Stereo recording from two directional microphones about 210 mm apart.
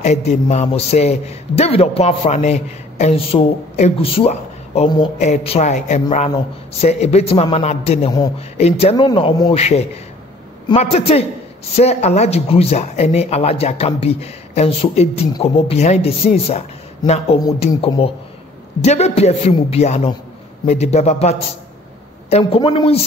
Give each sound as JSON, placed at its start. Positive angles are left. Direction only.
{"t": 0.0, "sound": "a man's voice", "side_deg": 30}